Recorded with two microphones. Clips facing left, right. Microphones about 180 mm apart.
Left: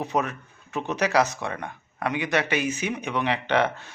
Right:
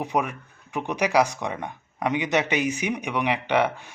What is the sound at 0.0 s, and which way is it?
A man's voice, 10° right (ahead or behind).